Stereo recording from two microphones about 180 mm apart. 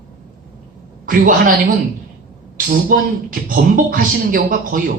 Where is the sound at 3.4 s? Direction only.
45° right (ahead or behind).